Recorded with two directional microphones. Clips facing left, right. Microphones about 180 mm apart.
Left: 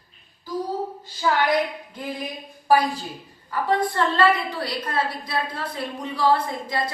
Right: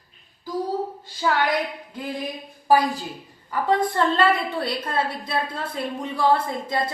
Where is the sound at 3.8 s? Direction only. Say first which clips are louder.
Even; 25° right (ahead or behind).